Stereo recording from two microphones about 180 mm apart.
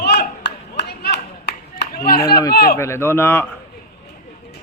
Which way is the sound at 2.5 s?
60° left (ahead or behind).